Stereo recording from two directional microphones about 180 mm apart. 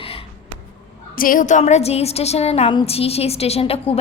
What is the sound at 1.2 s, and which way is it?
A woman's voice, 50° left (ahead or behind).